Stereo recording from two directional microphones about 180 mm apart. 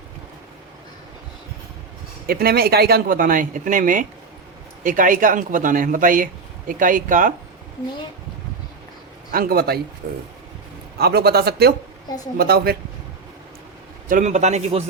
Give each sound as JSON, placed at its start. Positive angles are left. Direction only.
{"t": 2.2, "sound": "speech", "side_deg": -55}
{"t": 9.3, "sound": "speech", "side_deg": -55}
{"t": 14.1, "sound": "a man's voice", "side_deg": -45}